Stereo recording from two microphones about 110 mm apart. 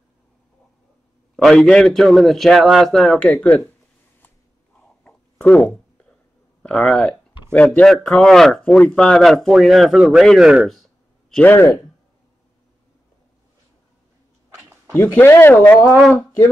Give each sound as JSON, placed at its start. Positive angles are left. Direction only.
{"t": 1.3, "sound": "a man's voice", "side_deg": 5}
{"t": 5.0, "sound": "a sound", "side_deg": 10}
{"t": 6.6, "sound": "a man's voice", "side_deg": 5}
{"t": 11.4, "sound": "speech", "side_deg": 20}
{"t": 15.0, "sound": "speech", "side_deg": 20}